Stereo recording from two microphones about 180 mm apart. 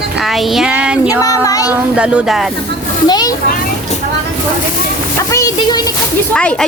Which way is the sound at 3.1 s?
20° left (ahead or behind).